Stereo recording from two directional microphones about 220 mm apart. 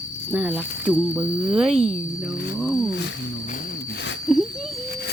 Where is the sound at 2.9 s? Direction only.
55° left (ahead or behind).